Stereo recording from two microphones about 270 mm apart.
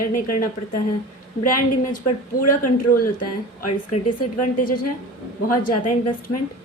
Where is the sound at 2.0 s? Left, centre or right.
Left.